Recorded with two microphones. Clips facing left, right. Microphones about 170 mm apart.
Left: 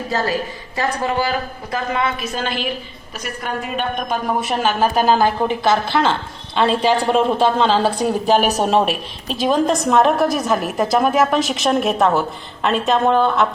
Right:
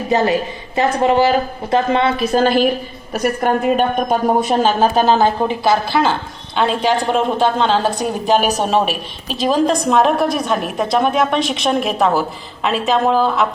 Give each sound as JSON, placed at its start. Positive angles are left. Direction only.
{"t": 0.1, "sound": "a woman's voice", "side_deg": -20}
{"t": 4.5, "sound": "a woman's voice", "side_deg": -30}
{"t": 5.9, "sound": "a woman's voice", "side_deg": -5}
{"t": 6.8, "sound": "a woman's voice", "side_deg": 5}